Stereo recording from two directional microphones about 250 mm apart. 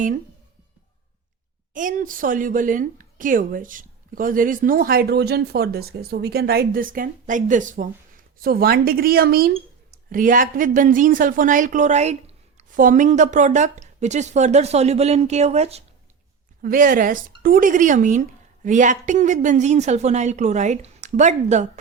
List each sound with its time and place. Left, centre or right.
1.7 s a woman's voice: right